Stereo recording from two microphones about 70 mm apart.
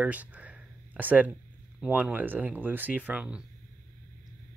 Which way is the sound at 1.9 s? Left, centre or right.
Right.